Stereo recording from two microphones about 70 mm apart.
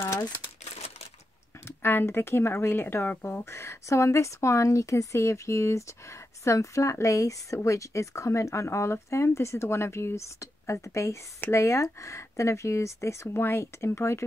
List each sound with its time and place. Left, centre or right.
1.8 s speech: left